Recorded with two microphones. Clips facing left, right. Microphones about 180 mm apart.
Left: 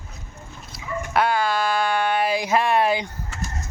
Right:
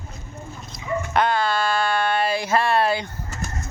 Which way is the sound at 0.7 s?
5° left (ahead or behind).